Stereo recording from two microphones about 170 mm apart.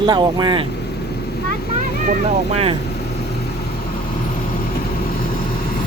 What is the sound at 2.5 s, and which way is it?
Speech, 35° right (ahead or behind).